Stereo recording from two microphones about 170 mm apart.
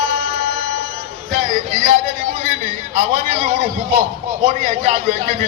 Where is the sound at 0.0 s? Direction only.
50° right (ahead or behind).